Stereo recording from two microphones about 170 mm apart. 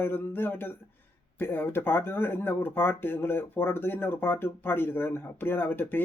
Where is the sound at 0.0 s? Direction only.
10° left (ahead or behind).